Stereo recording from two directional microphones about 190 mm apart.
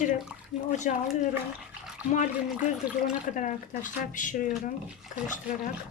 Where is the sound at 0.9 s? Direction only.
40° left (ahead or behind).